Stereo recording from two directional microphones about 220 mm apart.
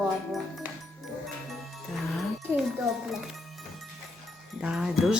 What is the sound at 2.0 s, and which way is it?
Music, centre (ahead or behind).